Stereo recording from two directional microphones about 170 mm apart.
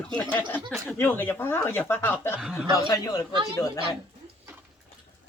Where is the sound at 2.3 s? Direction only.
5° right (ahead or behind).